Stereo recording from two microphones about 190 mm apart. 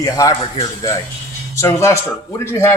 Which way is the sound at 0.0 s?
15° left (ahead or behind).